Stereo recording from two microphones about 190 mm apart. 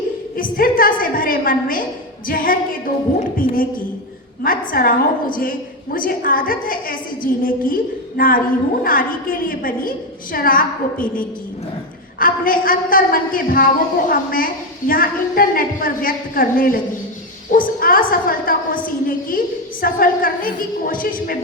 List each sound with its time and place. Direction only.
0.5 s a woman's voice: 50° left (ahead or behind)